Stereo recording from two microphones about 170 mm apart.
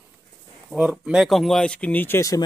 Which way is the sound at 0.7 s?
5° right (ahead or behind).